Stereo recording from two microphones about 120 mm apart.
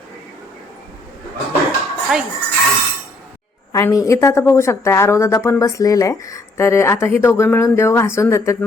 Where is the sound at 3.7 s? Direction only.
25° left (ahead or behind).